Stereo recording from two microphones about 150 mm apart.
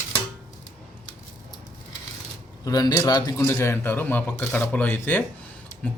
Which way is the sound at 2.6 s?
25° left (ahead or behind).